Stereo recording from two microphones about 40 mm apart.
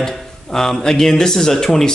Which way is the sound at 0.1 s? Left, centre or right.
Centre.